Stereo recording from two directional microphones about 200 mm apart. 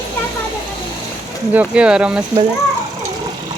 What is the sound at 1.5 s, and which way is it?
Speech, 5° right (ahead or behind).